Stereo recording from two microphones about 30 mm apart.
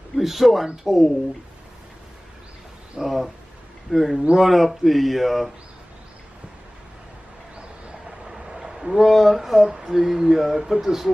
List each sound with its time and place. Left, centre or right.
0.2 s speech: centre
3.0 s speech: centre
8.5 s a sound: right
9.1 s speech: centre
9.6 s speech: right